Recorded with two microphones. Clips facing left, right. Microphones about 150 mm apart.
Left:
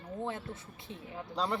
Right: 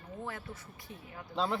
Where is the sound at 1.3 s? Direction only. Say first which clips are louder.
Right 1 dB; centre (ahead or behind).